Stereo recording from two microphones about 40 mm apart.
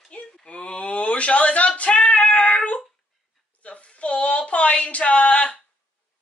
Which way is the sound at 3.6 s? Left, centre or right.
Left.